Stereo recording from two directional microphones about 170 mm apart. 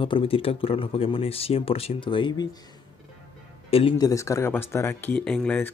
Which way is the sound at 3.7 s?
35° left (ahead or behind).